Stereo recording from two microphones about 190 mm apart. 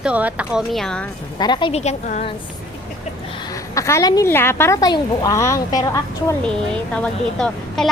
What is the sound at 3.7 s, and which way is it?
A woman's voice, 15° left (ahead or behind).